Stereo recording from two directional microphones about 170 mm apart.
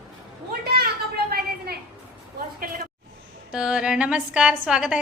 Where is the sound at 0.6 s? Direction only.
70° right (ahead or behind).